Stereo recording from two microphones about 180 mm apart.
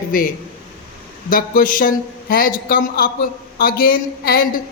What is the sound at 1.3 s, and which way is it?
A man's voice, 50° left (ahead or behind).